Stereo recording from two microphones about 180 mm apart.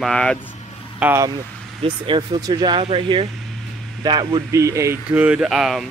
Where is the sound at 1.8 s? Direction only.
30° right (ahead or behind).